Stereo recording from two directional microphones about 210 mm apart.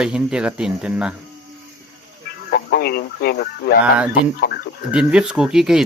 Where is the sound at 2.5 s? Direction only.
50° left (ahead or behind).